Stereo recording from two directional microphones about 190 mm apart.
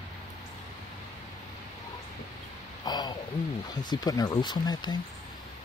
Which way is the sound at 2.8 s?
20° left (ahead or behind).